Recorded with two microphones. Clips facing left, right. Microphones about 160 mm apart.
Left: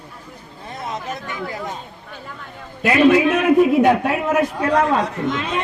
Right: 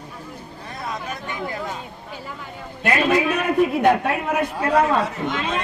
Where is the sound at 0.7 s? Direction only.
20° left (ahead or behind).